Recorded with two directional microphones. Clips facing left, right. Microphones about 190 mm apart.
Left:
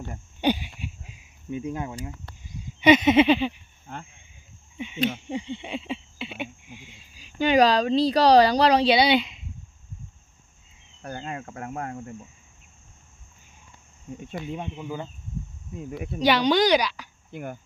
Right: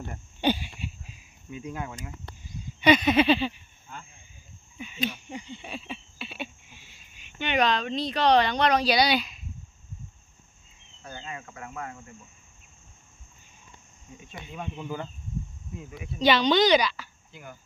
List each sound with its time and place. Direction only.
0.4 s a sound: 15° left (ahead or behind)
1.5 s a sound: 25° left (ahead or behind)
3.9 s speech: 55° left (ahead or behind)
5.1 s a sound: 25° left (ahead or behind)
7.2 s speech: 35° left (ahead or behind)
11.0 s speech: 55° left (ahead or behind)
14.1 s speech: 55° left (ahead or behind)
14.6 s a woman's voice: 15° left (ahead or behind)
16.2 s a woman's voice: 10° left (ahead or behind)
17.3 s speech: 55° left (ahead or behind)